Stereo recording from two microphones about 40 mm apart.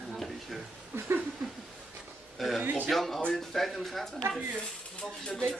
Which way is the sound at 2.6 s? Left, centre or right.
Right.